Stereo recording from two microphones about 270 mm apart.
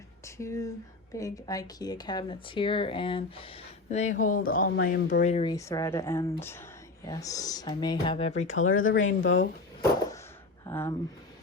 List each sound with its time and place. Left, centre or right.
0.3 s speech: centre; by 5.2 s left
5.2 s speech: left
8.5 s speech: left
10.7 s speech: centre